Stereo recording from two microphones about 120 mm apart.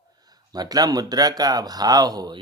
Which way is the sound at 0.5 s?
35° right (ahead or behind).